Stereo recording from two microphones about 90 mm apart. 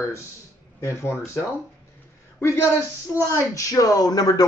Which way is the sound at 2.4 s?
30° left (ahead or behind).